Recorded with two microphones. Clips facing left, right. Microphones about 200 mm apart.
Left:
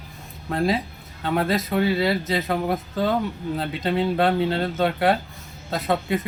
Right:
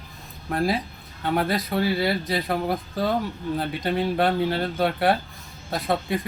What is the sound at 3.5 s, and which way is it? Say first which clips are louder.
Speech: left 1 dB; 25° left (ahead or behind).